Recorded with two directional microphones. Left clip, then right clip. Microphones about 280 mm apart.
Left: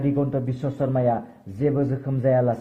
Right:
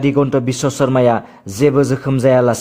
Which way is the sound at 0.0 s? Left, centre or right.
Right.